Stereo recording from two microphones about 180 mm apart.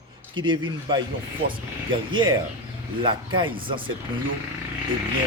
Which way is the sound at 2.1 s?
25° right (ahead or behind).